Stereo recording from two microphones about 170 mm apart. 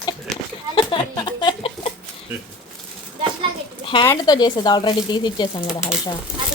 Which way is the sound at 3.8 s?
30° left (ahead or behind).